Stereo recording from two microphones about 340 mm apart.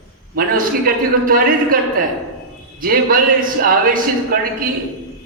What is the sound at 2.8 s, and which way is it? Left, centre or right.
A man's voice, right.